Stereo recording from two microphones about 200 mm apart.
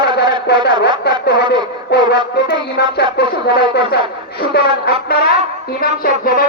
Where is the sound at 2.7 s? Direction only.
50° left (ahead or behind).